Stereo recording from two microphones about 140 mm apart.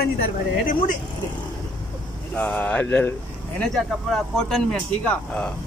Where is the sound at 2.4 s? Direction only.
10° left (ahead or behind).